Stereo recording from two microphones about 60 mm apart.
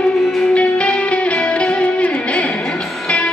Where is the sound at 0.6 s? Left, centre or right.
Centre.